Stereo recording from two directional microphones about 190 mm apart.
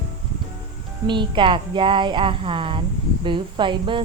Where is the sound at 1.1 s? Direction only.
25° right (ahead or behind).